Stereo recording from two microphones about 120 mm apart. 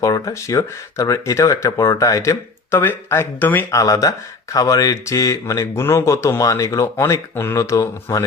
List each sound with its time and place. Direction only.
0.0 s speech: 30° left (ahead or behind)
3.8 s speech: 30° left (ahead or behind)